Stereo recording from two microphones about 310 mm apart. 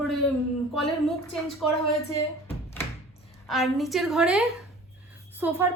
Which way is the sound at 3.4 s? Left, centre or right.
Centre.